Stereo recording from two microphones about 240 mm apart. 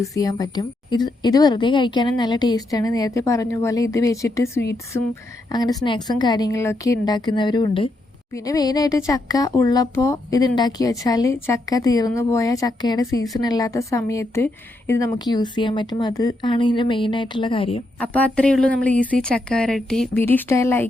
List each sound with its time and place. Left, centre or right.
0.1 s speech: centre
18.0 s speech: centre